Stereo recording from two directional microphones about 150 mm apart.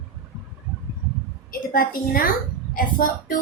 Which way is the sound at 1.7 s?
75° left (ahead or behind).